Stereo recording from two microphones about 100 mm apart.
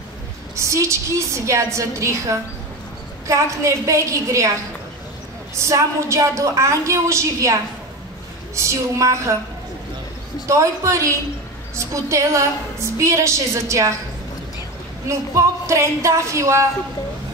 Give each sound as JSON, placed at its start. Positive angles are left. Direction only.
{"t": 0.6, "sound": "a woman's voice", "side_deg": -30}
{"t": 5.6, "sound": "a woman's voice", "side_deg": -30}
{"t": 10.5, "sound": "a woman's voice", "side_deg": -30}
{"t": 15.0, "sound": "a woman's voice", "side_deg": -30}